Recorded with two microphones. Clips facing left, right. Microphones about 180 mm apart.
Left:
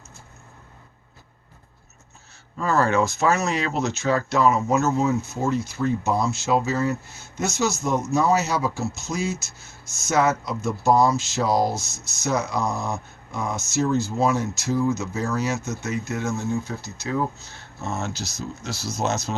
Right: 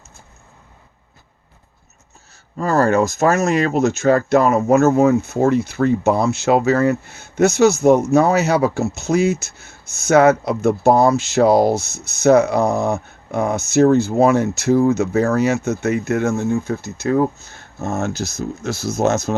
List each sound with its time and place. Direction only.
2.6 s speech: 40° right (ahead or behind)